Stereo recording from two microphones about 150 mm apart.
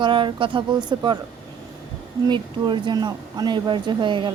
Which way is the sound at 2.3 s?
30° right (ahead or behind).